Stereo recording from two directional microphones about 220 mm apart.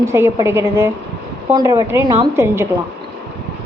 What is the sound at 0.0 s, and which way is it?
A woman's voice, 10° right (ahead or behind).